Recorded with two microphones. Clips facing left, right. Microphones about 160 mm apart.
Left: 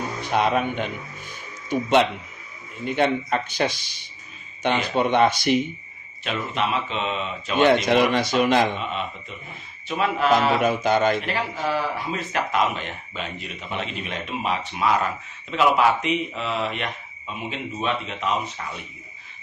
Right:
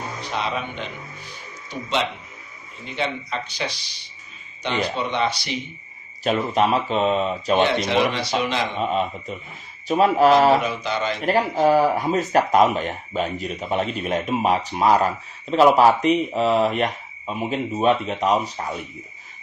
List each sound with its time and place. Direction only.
0.2 s speech: 50° left (ahead or behind)
6.2 s speech: 40° right (ahead or behind)
7.6 s speech: 50° left (ahead or behind)
8.8 s speech: 40° right (ahead or behind)
10.6 s speech: 50° left (ahead or behind)
11.2 s speech: 45° right (ahead or behind)